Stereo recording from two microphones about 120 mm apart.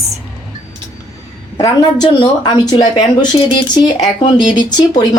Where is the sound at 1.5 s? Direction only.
30° left (ahead or behind).